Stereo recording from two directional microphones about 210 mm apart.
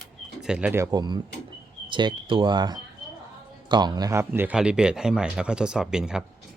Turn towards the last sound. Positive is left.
turn(degrees=-5)  # may be behind; listen again after turning